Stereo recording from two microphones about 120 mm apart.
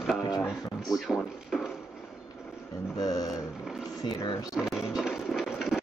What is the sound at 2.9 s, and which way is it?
Speech, 30° left (ahead or behind).